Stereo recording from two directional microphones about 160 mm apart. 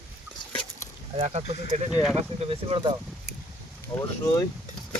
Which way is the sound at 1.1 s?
40° right (ahead or behind).